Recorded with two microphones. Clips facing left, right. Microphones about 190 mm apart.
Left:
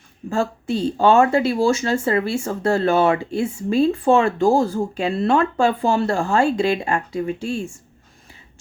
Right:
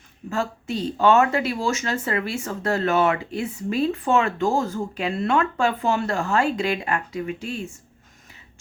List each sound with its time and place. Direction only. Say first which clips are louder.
0.3 s speech: left 5 dB; 30° left (ahead or behind)